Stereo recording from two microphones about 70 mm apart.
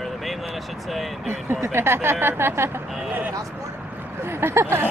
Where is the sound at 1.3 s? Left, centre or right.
Right.